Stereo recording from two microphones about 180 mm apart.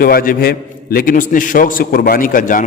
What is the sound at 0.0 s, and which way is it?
A man's voice, 55° left (ahead or behind).